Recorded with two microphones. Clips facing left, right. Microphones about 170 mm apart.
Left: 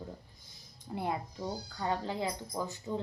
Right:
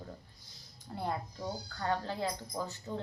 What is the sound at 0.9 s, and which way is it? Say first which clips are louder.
A woman's voice: left 2 dB; 15° left (ahead or behind).